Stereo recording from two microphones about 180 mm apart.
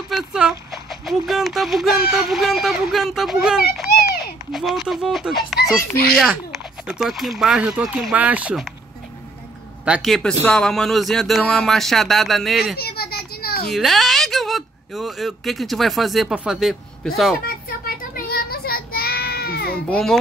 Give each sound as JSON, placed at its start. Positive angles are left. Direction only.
{"t": 0.1, "sound": "speech", "side_deg": -5}
{"t": 3.7, "sound": "a sound", "side_deg": 0}
{"t": 4.5, "sound": "speech", "side_deg": 0}
{"t": 5.8, "sound": "speech", "side_deg": 55}
{"t": 6.1, "sound": "speech", "side_deg": 0}
{"t": 9.8, "sound": "speech", "side_deg": 0}
{"t": 12.7, "sound": "a sound", "side_deg": 60}
{"t": 13.7, "sound": "speech", "side_deg": 0}
{"t": 17.5, "sound": "child singing", "side_deg": 50}
{"t": 19.9, "sound": "speech", "side_deg": 0}